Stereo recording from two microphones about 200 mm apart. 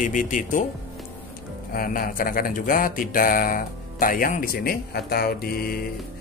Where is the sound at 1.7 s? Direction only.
45° left (ahead or behind).